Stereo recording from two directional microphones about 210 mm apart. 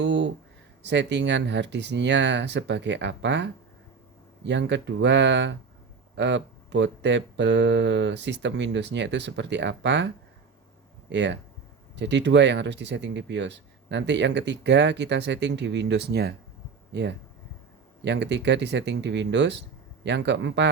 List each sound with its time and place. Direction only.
0.0 s a sound: 60° right (ahead or behind)
0.9 s speech: 55° right (ahead or behind)
11.1 s speech: 55° right (ahead or behind)